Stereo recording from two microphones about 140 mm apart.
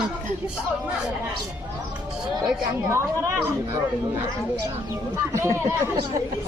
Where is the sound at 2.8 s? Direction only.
15° right (ahead or behind).